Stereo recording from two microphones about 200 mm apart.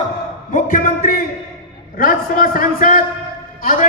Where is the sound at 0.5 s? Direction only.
45° left (ahead or behind).